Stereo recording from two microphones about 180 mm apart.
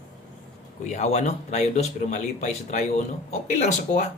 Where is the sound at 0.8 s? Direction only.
40° left (ahead or behind).